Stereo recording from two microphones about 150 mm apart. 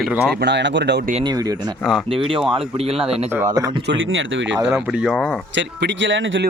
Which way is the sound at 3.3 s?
15° right (ahead or behind).